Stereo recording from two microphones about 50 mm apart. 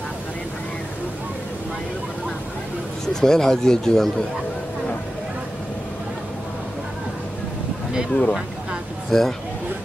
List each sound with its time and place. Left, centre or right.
3.1 s speech: centre
8.1 s speech: centre